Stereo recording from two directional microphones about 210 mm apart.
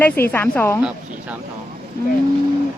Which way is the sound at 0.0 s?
10° left (ahead or behind).